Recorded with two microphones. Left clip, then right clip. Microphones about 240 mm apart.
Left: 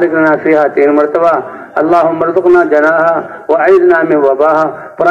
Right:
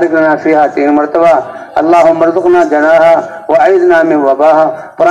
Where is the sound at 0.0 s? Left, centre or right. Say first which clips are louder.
Right 1 dB; right.